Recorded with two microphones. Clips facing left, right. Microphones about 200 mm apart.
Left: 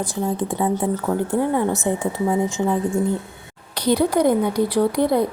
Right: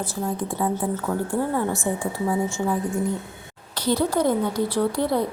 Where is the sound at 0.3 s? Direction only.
25° left (ahead or behind).